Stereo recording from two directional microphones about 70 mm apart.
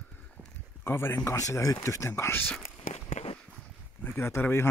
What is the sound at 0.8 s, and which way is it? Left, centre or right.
Speech, left.